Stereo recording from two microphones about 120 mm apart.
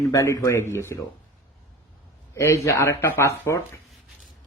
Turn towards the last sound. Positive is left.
turn(degrees=20)  # may be behind; listen again after turning